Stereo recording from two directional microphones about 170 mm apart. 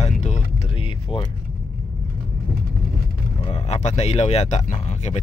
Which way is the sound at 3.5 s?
35° left (ahead or behind).